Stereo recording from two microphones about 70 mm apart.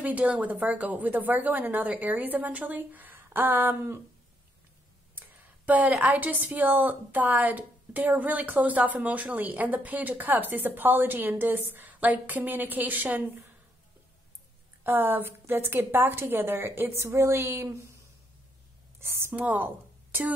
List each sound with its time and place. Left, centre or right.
0.0 s a woman's voice: right
5.1 s a sound: right
6.0 s a woman's voice: right
14.8 s a woman's voice: right
18.9 s a woman's voice: right
19.3 s speech: right